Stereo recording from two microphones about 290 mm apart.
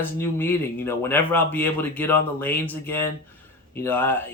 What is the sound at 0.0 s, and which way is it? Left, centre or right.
Speech, centre.